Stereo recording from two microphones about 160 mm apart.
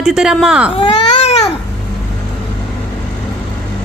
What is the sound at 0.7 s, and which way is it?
Baby cry, 35° left (ahead or behind).